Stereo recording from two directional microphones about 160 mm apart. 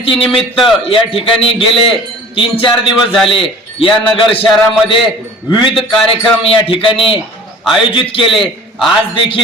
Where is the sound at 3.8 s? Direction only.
35° left (ahead or behind).